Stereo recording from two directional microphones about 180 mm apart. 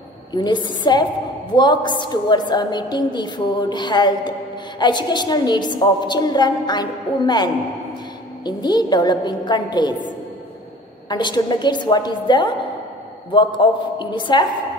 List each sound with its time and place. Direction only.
0.3 s a woman's voice: 25° left (ahead or behind)
11.1 s a woman's voice: 25° left (ahead or behind)
13.6 s a woman's voice: 25° left (ahead or behind)